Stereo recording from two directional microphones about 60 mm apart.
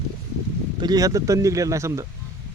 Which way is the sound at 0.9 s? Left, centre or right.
Right.